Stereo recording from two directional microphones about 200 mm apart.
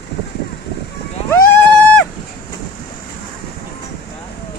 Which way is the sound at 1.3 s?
10° left (ahead or behind).